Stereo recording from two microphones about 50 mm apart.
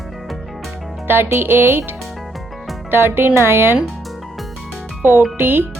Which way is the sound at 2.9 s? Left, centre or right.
Right.